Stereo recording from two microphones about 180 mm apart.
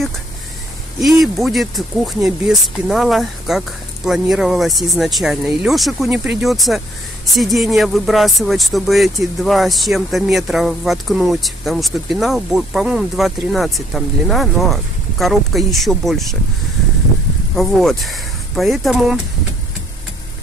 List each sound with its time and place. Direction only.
1.0 s speech: centre (ahead or behind)
17.6 s speech: centre (ahead or behind)